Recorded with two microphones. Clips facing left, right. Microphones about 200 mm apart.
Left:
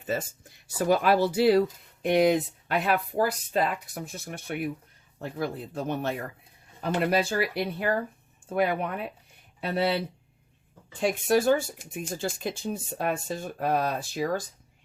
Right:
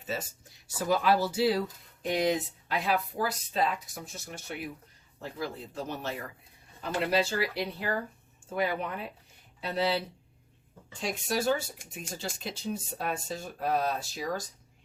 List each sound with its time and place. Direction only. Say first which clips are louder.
0.9 s speech: left 4 dB; 60° left (ahead or behind)
11.0 s speech: left 7 dB; 55° left (ahead or behind)